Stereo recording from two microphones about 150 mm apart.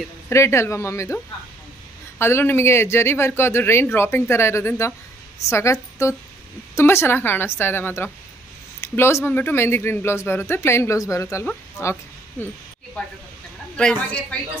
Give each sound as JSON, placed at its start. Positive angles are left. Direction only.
{"t": 0.3, "sound": "speech", "side_deg": 20}
{"t": 13.7, "sound": "a woman's voice", "side_deg": 5}